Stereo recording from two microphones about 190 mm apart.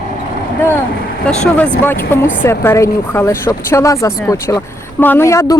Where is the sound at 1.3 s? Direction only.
5° left (ahead or behind).